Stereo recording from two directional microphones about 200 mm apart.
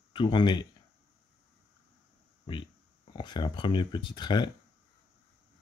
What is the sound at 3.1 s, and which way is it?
Speech, 25° left (ahead or behind).